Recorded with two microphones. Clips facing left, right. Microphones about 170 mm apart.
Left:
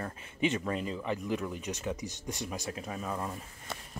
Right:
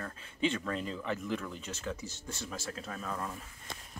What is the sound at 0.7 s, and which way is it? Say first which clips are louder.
Speech: left 2 dB; 5° left (ahead or behind).